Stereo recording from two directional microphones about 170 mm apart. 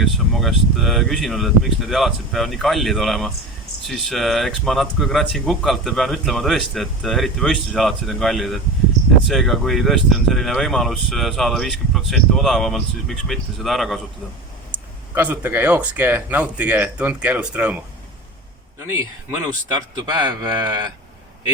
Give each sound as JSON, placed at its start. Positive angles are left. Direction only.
{"t": 0.0, "sound": "speech", "side_deg": 0}
{"t": 14.7, "sound": "speech", "side_deg": -10}
{"t": 19.7, "sound": "speech", "side_deg": -25}